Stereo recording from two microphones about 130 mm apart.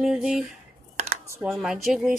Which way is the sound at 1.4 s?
Centre (ahead or behind).